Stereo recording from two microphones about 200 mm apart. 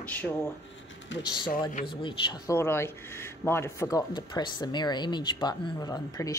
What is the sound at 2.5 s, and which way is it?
Speech, 10° left (ahead or behind).